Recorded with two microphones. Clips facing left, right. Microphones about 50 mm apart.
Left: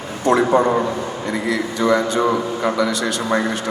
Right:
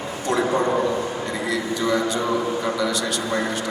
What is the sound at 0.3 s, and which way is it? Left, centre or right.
A man's voice, left.